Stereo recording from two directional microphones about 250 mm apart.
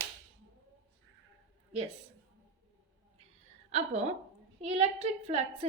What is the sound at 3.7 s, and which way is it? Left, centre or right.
A woman's voice, right.